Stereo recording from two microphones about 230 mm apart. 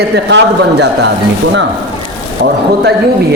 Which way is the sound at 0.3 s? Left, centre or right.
Right.